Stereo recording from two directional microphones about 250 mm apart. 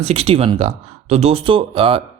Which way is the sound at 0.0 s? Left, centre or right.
Right.